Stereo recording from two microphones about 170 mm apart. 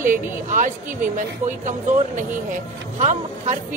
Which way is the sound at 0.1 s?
50° right (ahead or behind).